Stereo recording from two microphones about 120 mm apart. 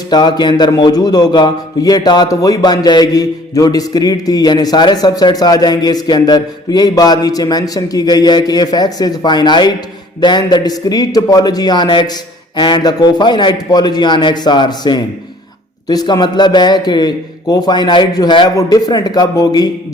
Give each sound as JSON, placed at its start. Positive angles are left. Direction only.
{"t": 0.1, "sound": "a man's voice", "side_deg": 35}